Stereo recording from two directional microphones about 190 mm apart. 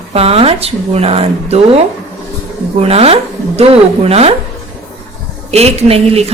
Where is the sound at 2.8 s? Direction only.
30° right (ahead or behind).